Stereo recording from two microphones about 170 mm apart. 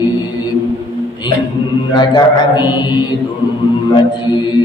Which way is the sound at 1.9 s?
25° left (ahead or behind).